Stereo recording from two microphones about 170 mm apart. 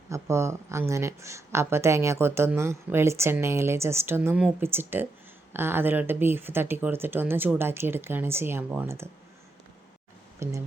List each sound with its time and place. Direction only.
0.1 s speech: 15° right (ahead or behind)
10.4 s speech: 15° right (ahead or behind)